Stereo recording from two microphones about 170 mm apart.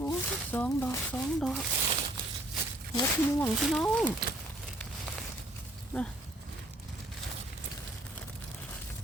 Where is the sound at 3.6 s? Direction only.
Centre (ahead or behind).